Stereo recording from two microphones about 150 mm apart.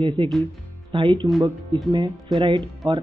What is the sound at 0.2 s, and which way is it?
Speech, 35° right (ahead or behind).